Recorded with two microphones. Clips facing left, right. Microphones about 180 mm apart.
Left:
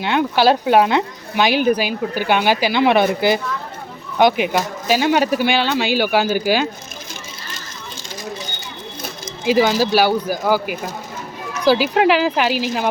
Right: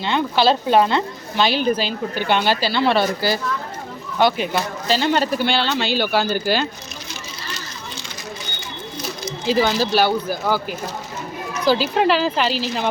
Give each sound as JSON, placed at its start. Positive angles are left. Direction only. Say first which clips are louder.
{"t": 0.0, "sound": "speech", "louder": "left 2 dB", "side_deg": 10}
{"t": 9.4, "sound": "speech", "louder": "left 3 dB", "side_deg": 10}